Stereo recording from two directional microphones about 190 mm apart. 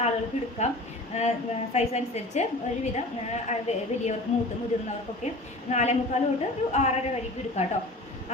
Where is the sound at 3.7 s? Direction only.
35° left (ahead or behind).